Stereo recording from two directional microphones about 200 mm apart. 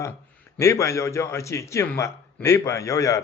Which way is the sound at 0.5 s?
15° left (ahead or behind).